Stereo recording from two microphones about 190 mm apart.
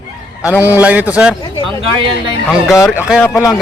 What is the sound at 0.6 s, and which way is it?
Speech, 10° right (ahead or behind).